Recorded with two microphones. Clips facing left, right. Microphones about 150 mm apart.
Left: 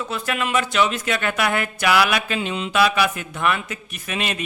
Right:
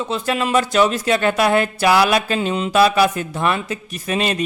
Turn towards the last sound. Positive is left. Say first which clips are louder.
# right 6 dB
turn(degrees=-35)  # may be behind; listen again after turning